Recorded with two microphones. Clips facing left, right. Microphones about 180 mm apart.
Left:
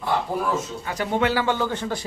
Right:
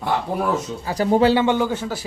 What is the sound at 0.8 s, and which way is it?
Speech, 35° right (ahead or behind).